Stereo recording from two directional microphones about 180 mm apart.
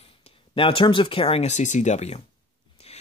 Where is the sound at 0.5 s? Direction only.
30° left (ahead or behind).